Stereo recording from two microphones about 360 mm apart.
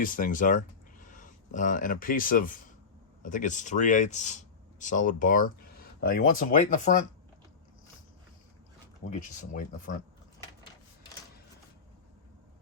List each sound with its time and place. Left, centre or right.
0.0 s speech: left
9.0 s speech: left